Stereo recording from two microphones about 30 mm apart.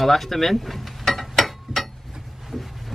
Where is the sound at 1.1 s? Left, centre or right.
Centre.